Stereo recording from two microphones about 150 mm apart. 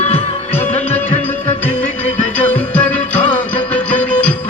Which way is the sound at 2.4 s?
10° left (ahead or behind).